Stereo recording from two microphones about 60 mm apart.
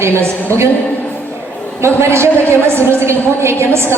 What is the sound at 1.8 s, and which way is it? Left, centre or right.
A woman's voice, right.